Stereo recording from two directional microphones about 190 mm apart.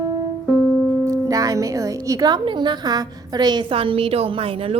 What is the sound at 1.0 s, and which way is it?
Speech, 15° right (ahead or behind).